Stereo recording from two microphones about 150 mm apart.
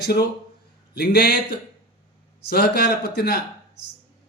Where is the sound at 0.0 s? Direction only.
90° left.